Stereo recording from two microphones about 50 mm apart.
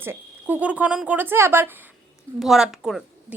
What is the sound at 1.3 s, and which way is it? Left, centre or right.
Speech, right.